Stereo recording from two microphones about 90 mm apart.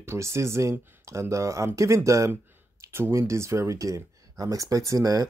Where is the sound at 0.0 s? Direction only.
30° right (ahead or behind).